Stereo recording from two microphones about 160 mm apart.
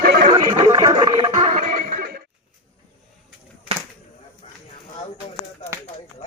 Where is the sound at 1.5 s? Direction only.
50° right (ahead or behind).